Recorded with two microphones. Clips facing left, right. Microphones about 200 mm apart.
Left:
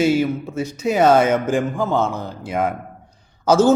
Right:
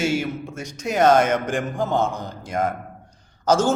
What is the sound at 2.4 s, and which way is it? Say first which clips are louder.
Speech: left 2 dB; 10° left (ahead or behind).